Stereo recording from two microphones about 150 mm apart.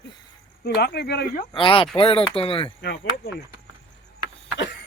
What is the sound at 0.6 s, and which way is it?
Speech, 90° left.